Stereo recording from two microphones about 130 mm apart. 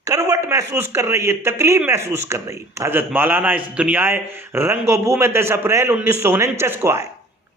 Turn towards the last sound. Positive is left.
turn(degrees=-20)  # may be behind; listen again after turning